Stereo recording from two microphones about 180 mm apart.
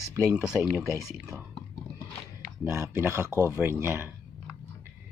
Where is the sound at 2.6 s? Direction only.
15° right (ahead or behind).